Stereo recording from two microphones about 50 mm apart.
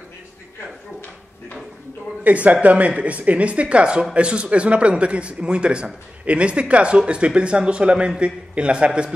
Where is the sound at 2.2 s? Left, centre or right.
Right.